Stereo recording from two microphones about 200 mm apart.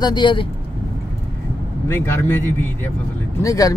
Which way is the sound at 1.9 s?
10° left (ahead or behind).